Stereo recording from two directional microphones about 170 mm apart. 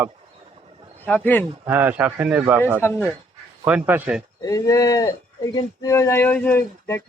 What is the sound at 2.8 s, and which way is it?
Speech, 15° left (ahead or behind).